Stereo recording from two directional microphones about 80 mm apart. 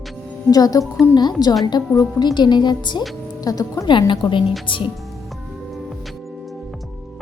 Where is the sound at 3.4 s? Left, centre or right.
Left.